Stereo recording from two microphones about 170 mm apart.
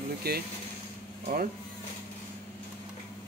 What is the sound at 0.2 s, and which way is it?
Speech, 70° right (ahead or behind).